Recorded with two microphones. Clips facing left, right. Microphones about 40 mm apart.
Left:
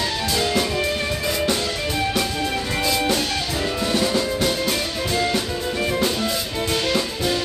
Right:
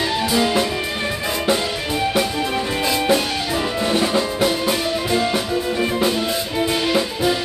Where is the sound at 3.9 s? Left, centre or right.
Right.